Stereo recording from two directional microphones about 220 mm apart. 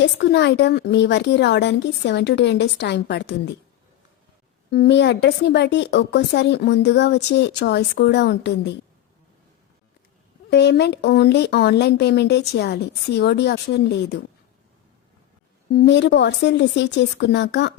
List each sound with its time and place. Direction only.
0.0 s speech: 50° left (ahead or behind)
4.7 s speech: 50° left (ahead or behind)
10.5 s speech: 50° left (ahead or behind)
15.7 s speech: 50° left (ahead or behind)